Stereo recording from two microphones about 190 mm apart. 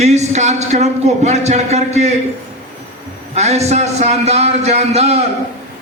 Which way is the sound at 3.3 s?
35° right (ahead or behind).